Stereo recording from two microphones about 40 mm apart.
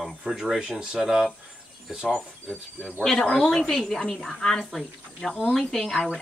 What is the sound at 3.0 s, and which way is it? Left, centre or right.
Speech, centre.